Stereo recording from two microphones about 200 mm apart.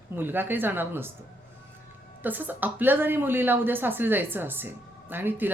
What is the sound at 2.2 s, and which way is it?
Speech, 10° right (ahead or behind).